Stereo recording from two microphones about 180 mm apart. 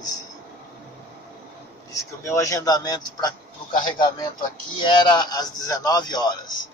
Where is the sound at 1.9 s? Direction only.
15° left (ahead or behind).